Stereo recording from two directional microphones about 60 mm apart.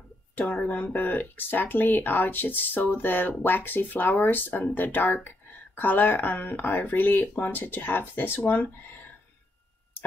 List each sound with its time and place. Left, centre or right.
0.6 s speech: left